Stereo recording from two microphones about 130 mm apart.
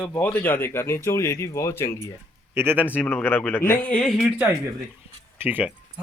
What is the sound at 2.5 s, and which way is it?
Speech, 15° right (ahead or behind).